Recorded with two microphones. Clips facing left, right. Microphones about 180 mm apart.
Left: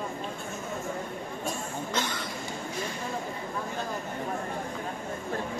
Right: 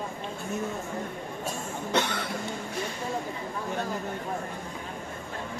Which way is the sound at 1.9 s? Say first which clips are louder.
Right 6 dB; 65° right (ahead or behind).